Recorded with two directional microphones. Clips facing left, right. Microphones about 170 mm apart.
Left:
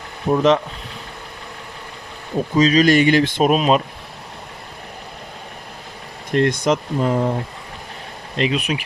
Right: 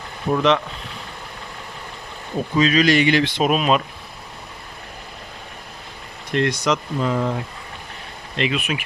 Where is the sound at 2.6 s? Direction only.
40° left (ahead or behind).